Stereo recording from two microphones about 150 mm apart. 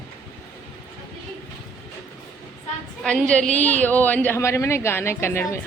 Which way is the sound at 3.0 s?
5° left (ahead or behind).